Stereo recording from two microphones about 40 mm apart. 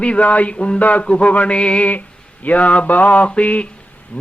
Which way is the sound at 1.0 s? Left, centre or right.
Left.